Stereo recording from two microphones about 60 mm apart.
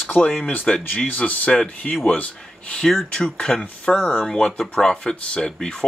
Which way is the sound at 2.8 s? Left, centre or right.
Centre.